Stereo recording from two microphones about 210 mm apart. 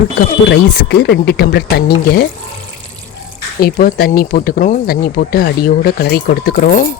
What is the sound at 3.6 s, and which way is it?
Speech, 45° left (ahead or behind).